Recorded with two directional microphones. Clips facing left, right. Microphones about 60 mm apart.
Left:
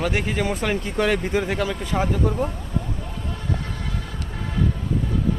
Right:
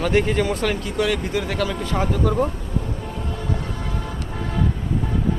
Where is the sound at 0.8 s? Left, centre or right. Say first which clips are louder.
Even; left.